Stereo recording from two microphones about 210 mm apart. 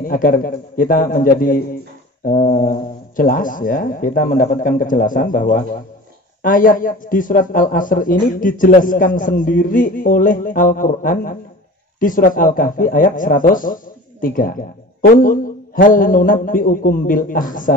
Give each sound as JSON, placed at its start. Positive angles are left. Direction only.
{"t": 0.0, "sound": "a man's voice", "side_deg": 45}